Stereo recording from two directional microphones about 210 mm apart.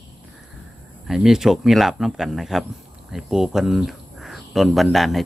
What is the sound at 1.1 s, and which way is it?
Speech, centre (ahead or behind).